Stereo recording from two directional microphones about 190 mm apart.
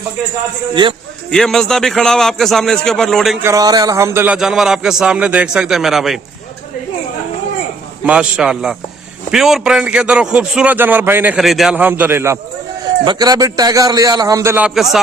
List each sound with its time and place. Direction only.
0.7 s a man's voice: 25° right (ahead or behind)
1.3 s a man's voice: centre (ahead or behind)
3.4 s a man's voice: 20° right (ahead or behind); by 6.1 s centre (ahead or behind)
8.0 s a man's voice: 5° right (ahead or behind)